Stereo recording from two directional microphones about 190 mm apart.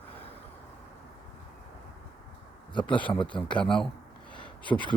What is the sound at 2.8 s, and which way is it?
Speech, 5° left (ahead or behind).